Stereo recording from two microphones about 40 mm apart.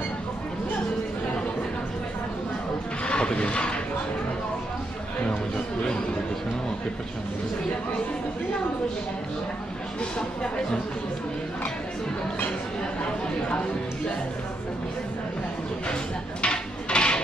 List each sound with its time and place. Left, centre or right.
3.1 s a sound: left
10.1 s speech: left
15.9 s dishes: left